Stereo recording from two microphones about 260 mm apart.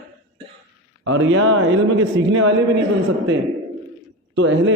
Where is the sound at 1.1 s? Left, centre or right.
Right.